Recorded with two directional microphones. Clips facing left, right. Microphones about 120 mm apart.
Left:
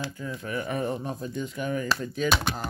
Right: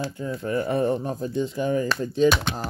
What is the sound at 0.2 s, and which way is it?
Speech, 35° right (ahead or behind).